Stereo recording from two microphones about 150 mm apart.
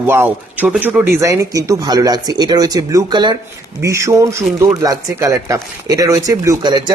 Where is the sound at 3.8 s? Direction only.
20° right (ahead or behind).